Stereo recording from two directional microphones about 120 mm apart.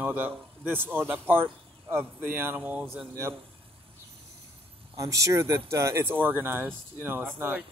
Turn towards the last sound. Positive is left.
turn(degrees=-15)  # may be behind; listen again after turning